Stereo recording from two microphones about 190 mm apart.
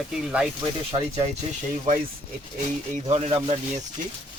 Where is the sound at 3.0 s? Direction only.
35° right (ahead or behind).